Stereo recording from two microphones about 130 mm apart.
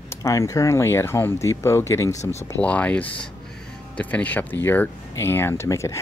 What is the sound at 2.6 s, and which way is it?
Speech, 10° left (ahead or behind).